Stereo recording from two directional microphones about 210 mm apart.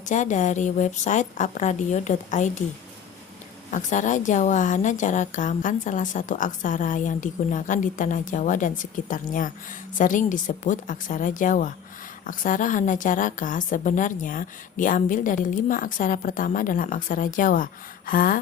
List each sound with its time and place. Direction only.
0.0 s a woman's voice: 35° left (ahead or behind)
3.7 s a woman's voice: 35° left (ahead or behind)